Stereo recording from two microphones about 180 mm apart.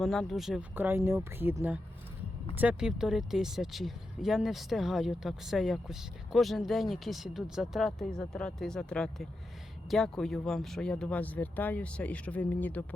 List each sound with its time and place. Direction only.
0.0 s speech: centre (ahead or behind)